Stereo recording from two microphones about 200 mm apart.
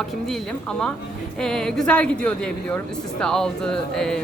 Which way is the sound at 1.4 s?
5° left (ahead or behind).